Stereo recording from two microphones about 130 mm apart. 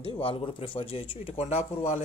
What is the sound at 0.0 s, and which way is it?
Speech, 45° left (ahead or behind).